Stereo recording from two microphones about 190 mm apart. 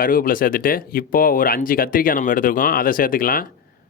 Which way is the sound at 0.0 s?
50° left (ahead or behind).